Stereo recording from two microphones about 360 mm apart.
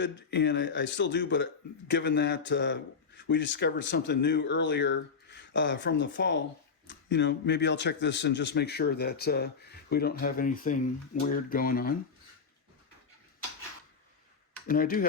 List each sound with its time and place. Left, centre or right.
0.0 s speech: left
14.7 s speech: left